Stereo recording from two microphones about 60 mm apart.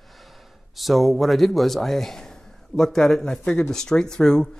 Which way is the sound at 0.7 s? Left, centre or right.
Centre.